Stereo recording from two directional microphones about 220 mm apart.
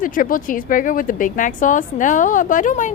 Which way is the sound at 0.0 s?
40° left (ahead or behind).